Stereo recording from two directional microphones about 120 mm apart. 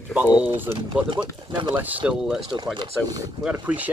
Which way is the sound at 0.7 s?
40° right (ahead or behind).